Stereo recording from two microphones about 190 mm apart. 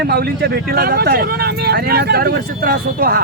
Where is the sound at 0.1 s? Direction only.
55° right (ahead or behind).